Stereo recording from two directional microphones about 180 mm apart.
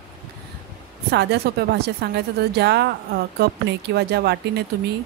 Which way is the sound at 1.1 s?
65° right (ahead or behind).